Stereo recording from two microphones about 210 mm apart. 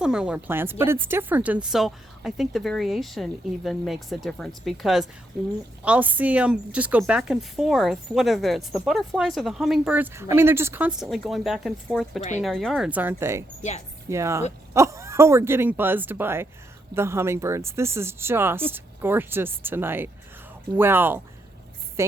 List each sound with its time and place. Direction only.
0.0 s a woman's voice: 5° right (ahead or behind)
13.6 s speech: 35° left (ahead or behind)
14.1 s speech: 15° right (ahead or behind)